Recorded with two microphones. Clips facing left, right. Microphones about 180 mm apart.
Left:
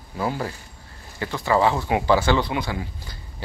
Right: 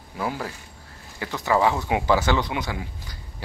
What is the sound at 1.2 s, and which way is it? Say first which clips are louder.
Speech: left 1 dB; 10° right (ahead or behind).